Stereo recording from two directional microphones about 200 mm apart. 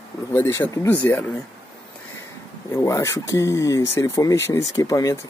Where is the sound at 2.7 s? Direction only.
15° left (ahead or behind).